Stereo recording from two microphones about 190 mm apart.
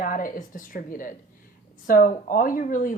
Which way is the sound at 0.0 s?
45° left (ahead or behind).